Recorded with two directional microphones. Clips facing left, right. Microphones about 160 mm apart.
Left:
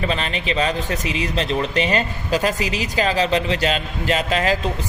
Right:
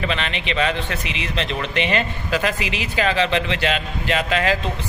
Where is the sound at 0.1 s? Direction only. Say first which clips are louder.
Left 2 dB; 40° left (ahead or behind).